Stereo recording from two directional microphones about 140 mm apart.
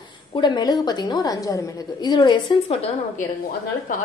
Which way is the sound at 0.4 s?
30° left (ahead or behind).